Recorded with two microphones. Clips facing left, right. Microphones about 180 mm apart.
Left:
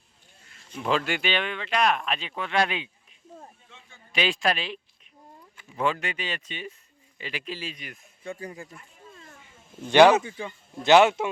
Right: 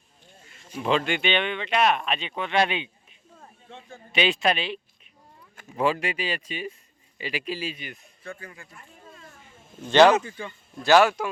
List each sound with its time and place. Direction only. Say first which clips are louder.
0.7 s speech: right 2 dB; centre (ahead or behind)
3.7 s a sound: right 10 dB; 40° right (ahead or behind)
4.1 s speech: right 2 dB; centre (ahead or behind)
5.8 s speech: right 3 dB; 10° right (ahead or behind)
8.4 s speech: left 6 dB; 35° left (ahead or behind)
9.9 s a man's voice: even; 10° left (ahead or behind)